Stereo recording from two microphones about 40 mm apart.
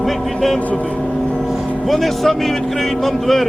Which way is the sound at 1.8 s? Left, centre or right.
Centre.